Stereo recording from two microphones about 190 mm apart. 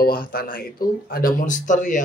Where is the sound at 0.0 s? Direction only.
50° left (ahead or behind).